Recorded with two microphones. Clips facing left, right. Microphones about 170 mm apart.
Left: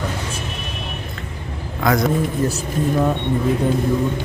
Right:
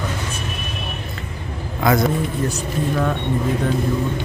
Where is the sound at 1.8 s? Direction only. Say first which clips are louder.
Even; centre (ahead or behind).